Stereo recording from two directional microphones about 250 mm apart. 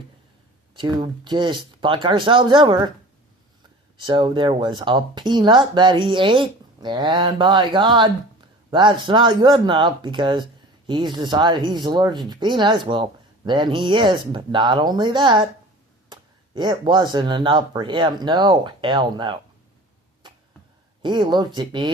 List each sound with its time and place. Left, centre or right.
0.8 s speech: centre
4.0 s speech: centre
16.6 s speech: centre
20.2 s arrow: centre
21.0 s speech: centre